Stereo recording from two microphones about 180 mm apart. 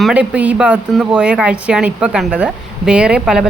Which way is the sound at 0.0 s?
5° right (ahead or behind).